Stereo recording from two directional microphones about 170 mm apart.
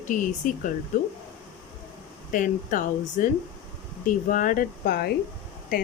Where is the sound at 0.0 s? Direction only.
50° left (ahead or behind).